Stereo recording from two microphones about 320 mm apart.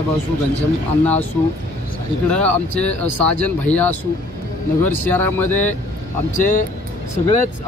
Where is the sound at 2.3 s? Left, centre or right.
Centre.